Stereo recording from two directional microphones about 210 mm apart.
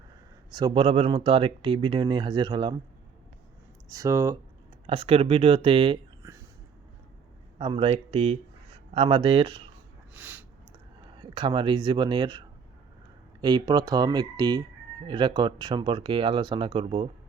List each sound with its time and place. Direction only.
0.5 s speech: 20° right (ahead or behind)
3.8 s speech: 15° right (ahead or behind)
4.9 s speech: 25° right (ahead or behind)
7.6 s speech: 25° right (ahead or behind)
10.2 s a sound: 5° right (ahead or behind)
11.2 s speech: 25° right (ahead or behind)